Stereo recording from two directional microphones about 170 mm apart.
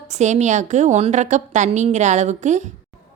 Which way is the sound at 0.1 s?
45° right (ahead or behind).